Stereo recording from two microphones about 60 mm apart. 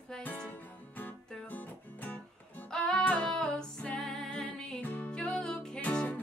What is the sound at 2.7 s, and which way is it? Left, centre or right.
Music, centre.